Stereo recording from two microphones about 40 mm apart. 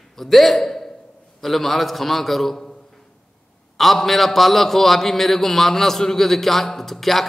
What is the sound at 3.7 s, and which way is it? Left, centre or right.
A man's voice, centre.